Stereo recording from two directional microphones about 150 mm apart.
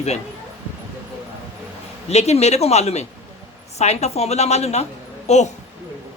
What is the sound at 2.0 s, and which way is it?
A woman's voice, 45° left (ahead or behind).